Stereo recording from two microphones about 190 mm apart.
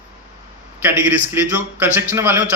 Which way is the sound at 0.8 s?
10° right (ahead or behind).